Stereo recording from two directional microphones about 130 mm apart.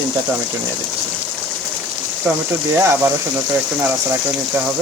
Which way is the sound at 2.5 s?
20° right (ahead or behind).